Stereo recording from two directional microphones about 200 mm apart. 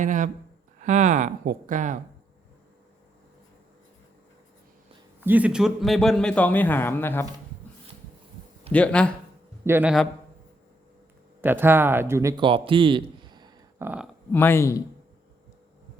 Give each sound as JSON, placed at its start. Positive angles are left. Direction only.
{"t": 0.0, "sound": "speech", "side_deg": -40}
{"t": 5.2, "sound": "a man's voice", "side_deg": -10}
{"t": 8.7, "sound": "a man's voice", "side_deg": 5}
{"t": 9.6, "sound": "a man's voice", "side_deg": -10}
{"t": 11.3, "sound": "a man's voice", "side_deg": -10}
{"t": 12.4, "sound": "a sound", "side_deg": -25}
{"t": 13.8, "sound": "a man's voice", "side_deg": -5}
{"t": 14.3, "sound": "a man's voice", "side_deg": 10}